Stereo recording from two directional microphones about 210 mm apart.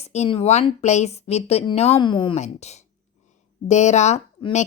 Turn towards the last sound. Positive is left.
turn(degrees=30)  # may be behind; listen again after turning